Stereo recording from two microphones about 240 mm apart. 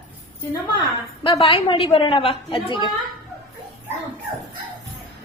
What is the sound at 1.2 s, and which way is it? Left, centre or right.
A woman's voice, left.